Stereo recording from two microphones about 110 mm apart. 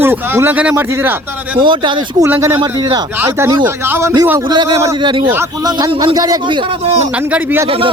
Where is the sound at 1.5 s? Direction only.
45° right (ahead or behind).